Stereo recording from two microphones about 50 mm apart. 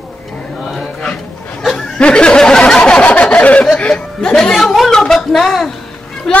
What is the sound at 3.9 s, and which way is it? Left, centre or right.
A woman's voice, centre.